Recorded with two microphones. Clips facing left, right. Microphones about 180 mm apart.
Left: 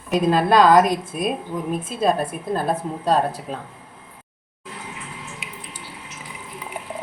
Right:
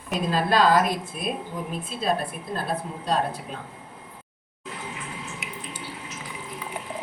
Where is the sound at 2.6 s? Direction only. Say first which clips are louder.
Left 4 dB; 45° left (ahead or behind).